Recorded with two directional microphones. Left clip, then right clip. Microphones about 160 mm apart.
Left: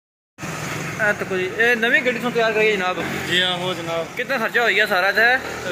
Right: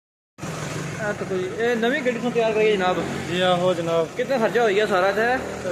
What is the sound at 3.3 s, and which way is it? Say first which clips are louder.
Speech: right 1 dB; 65° right (ahead or behind).